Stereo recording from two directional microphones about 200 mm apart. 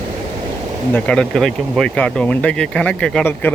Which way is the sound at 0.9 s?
5° left (ahead or behind).